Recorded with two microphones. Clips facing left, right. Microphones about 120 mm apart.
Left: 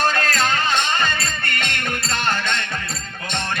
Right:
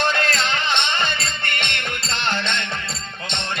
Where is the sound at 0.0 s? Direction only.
40° left (ahead or behind).